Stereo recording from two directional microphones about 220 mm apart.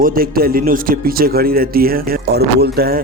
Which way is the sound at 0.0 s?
40° right (ahead or behind).